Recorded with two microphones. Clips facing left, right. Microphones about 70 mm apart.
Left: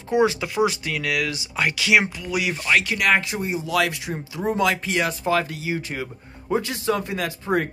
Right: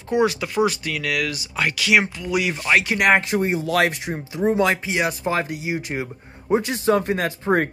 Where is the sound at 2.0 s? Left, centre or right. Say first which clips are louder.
Right 2 dB; centre.